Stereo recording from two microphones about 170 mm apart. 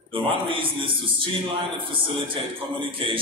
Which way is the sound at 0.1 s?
30° right (ahead or behind).